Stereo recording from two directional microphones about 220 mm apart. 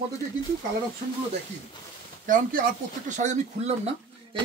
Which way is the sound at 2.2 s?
35° right (ahead or behind).